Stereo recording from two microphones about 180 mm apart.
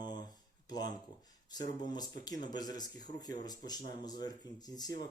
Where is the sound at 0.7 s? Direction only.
20° left (ahead or behind).